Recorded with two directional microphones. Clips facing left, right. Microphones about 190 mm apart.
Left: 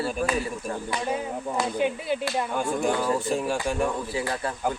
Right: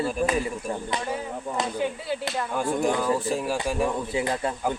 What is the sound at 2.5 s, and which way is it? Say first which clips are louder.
Speech: right 3 dB; centre (ahead or behind).